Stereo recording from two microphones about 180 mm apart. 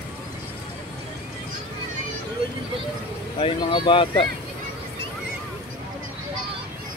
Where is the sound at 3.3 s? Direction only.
30° left (ahead or behind).